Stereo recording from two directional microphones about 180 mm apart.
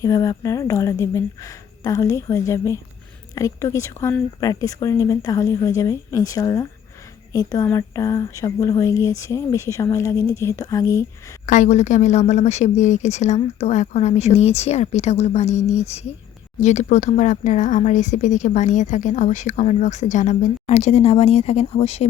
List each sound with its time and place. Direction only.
0.0 s speech: 20° left (ahead or behind)
11.4 s speech: 45° left (ahead or behind)